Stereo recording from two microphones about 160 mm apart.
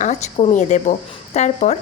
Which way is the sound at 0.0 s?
45° left (ahead or behind).